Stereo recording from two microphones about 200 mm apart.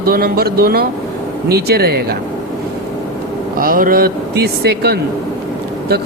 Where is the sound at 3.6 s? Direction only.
45° right (ahead or behind).